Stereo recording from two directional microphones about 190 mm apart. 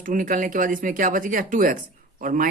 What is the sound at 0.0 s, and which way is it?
Speech, 45° right (ahead or behind).